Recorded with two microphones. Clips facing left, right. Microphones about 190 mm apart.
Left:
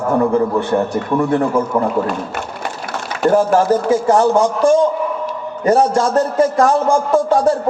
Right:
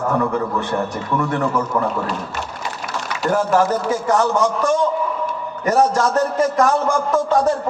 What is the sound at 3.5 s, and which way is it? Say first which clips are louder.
A man's voice: left 4 dB; 30° left (ahead or behind).